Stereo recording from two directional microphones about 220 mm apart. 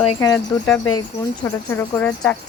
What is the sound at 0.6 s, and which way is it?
Speech, 5° left (ahead or behind).